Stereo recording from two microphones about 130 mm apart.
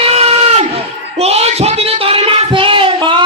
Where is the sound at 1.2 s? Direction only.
55° right (ahead or behind).